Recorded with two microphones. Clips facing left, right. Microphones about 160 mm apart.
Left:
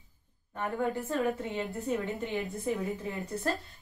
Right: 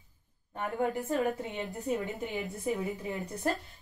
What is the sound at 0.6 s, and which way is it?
A woman's voice, 20° right (ahead or behind).